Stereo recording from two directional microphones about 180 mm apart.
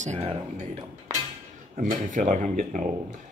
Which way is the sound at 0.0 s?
35° right (ahead or behind).